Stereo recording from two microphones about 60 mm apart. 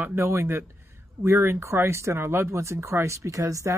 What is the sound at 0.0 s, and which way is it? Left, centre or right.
Speech, right.